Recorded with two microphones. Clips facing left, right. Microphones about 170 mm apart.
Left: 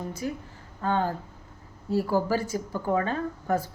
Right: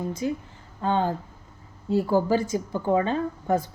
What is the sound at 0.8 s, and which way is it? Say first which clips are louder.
Speech: right 2 dB; 25° right (ahead or behind).